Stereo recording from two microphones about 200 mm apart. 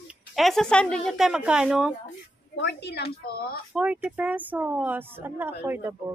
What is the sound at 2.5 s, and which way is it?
A woman's voice, 60° left (ahead or behind).